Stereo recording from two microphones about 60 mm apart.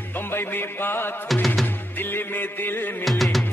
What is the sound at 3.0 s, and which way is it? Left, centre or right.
Music, centre.